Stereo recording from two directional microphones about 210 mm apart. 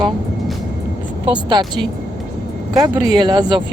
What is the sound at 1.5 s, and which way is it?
Speech, 20° right (ahead or behind).